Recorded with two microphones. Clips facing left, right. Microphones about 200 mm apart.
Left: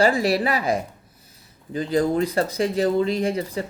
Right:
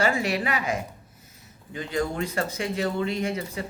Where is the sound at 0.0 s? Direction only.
35° left (ahead or behind).